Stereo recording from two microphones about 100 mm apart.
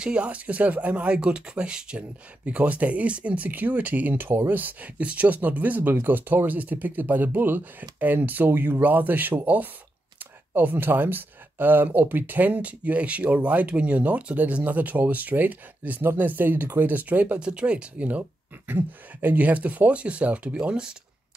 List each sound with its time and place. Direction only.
0.0 s speech: 10° right (ahead or behind)